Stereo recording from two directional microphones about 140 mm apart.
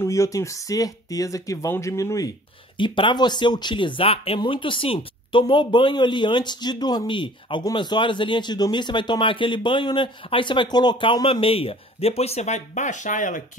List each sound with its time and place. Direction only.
0.0 s speech: 20° left (ahead or behind)
2.8 s speech: 35° left (ahead or behind); by 13.4 s 65° left (ahead or behind)